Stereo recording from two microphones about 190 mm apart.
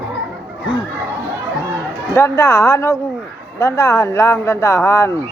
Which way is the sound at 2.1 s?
15° left (ahead or behind).